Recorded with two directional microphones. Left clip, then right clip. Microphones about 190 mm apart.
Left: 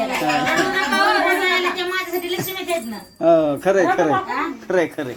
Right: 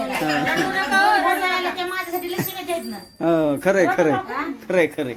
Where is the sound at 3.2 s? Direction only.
20° right (ahead or behind).